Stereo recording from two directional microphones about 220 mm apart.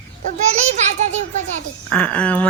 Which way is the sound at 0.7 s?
30° right (ahead or behind).